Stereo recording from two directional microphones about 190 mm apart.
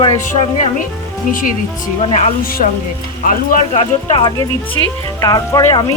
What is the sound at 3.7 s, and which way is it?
Speech, 25° left (ahead or behind).